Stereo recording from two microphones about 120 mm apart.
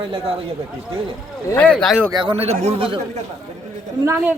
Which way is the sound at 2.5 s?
65° right (ahead or behind).